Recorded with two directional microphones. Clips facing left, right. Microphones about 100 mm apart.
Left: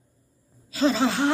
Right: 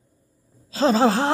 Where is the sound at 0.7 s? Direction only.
35° right (ahead or behind).